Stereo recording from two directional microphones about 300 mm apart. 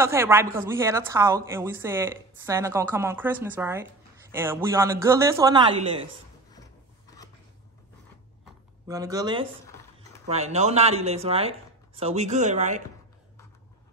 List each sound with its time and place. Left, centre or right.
0.0 s a woman's voice: centre
8.8 s a woman's voice: centre